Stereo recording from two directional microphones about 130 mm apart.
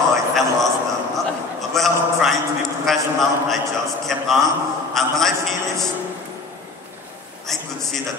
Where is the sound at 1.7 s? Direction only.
Centre (ahead or behind).